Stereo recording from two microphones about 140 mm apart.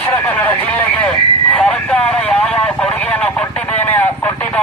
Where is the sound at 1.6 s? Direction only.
10° left (ahead or behind).